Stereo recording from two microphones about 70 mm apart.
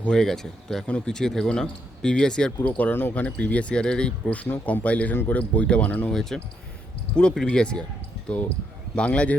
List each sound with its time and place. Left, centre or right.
0.2 s speech: centre
2.7 s speech: left
6.1 s speech: centre
9.0 s speech: centre